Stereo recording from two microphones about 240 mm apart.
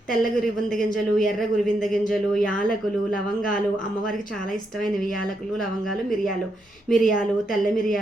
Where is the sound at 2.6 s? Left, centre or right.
Left.